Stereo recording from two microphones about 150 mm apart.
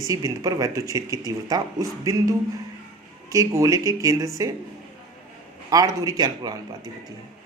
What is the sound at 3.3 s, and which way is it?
Speech, 20° right (ahead or behind).